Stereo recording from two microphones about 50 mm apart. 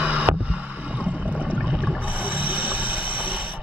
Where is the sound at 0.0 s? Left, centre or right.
Right.